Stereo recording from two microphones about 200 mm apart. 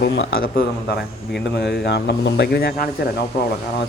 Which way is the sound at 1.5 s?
55° left (ahead or behind).